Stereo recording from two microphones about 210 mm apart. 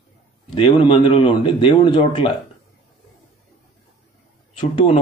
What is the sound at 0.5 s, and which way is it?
A man's voice, 25° left (ahead or behind).